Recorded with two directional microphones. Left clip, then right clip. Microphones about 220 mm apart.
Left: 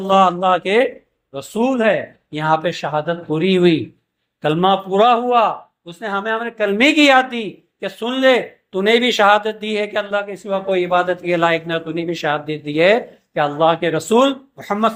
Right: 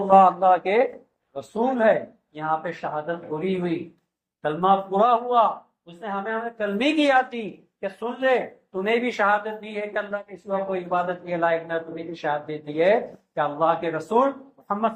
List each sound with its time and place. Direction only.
0.1 s a man's voice: 50° left (ahead or behind)